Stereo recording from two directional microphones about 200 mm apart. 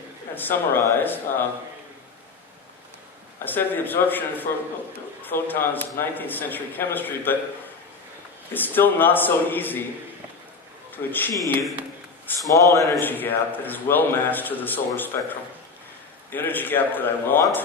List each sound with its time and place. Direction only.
0.3 s a man's voice: 10° left (ahead or behind)
3.4 s a man's voice: 10° left (ahead or behind)
8.5 s a man's voice: 10° left (ahead or behind)
10.9 s a man's voice: 10° left (ahead or behind)
12.5 s a man's voice: 15° left (ahead or behind)